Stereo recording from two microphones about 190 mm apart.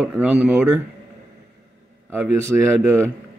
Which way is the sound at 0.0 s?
5° right (ahead or behind).